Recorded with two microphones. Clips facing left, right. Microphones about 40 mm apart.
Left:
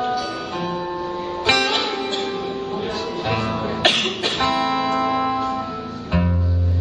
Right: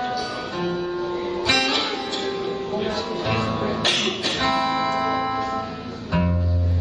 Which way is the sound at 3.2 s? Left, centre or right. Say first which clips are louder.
Left 2 dB; centre.